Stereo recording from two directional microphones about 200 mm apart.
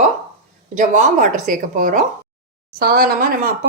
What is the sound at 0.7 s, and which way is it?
A woman's voice, 40° right (ahead or behind).